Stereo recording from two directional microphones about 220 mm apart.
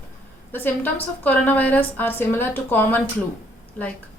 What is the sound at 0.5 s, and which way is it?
A woman's voice, 10° left (ahead or behind).